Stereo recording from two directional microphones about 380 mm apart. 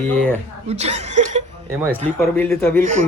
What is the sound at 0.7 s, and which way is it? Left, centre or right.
Speech, centre.